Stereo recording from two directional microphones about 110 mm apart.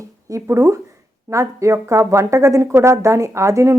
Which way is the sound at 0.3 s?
30° right (ahead or behind).